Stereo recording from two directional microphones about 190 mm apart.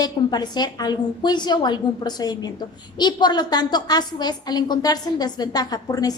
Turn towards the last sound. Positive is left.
turn(degrees=20)  # may be behind; listen again after turning